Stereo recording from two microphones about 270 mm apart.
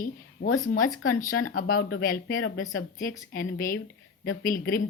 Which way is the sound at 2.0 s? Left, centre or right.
Left.